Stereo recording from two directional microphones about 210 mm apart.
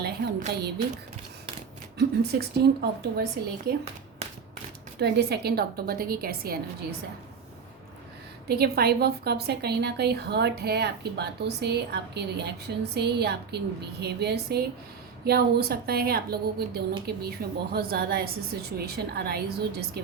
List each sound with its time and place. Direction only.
0.0 s a sound: 50° right (ahead or behind)
2.0 s a woman's voice: 50° right (ahead or behind)
4.9 s a woman's voice: 50° right (ahead or behind)
8.4 s a woman's voice: 50° right (ahead or behind)